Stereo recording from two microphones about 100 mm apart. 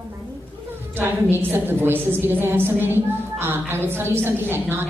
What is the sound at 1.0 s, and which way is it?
A woman's voice, 20° right (ahead or behind).